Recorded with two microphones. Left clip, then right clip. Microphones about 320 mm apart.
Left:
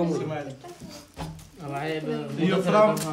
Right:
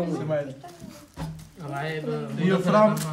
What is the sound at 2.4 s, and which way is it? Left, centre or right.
Speech, centre.